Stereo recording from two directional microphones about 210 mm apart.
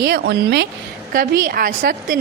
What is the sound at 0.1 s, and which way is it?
Speech, 50° right (ahead or behind).